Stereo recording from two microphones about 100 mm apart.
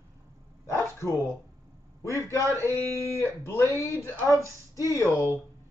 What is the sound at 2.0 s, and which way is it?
Speech, 30° left (ahead or behind).